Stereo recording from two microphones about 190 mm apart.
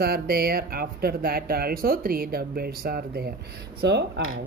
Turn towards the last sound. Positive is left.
turn(degrees=-65)  # may be behind; listen again after turning